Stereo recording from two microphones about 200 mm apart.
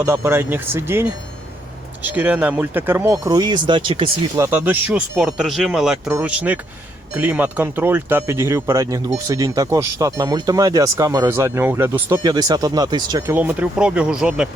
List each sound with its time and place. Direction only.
0.0 s speech: 15° right (ahead or behind)
4.4 s speech: 10° right (ahead or behind)